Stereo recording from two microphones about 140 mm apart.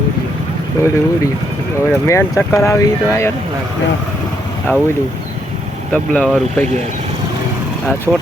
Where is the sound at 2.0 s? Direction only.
20° left (ahead or behind).